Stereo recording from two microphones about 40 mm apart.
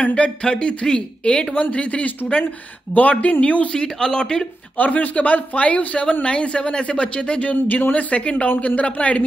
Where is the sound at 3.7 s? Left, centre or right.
Centre.